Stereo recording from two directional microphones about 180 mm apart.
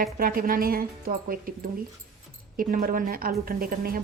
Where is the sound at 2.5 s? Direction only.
50° right (ahead or behind).